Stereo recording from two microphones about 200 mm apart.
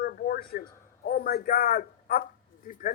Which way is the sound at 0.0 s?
50° left (ahead or behind).